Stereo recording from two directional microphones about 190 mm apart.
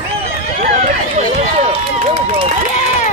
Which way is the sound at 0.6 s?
35° right (ahead or behind).